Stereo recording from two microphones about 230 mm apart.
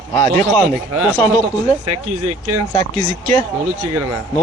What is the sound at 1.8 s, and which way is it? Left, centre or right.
Speech, right.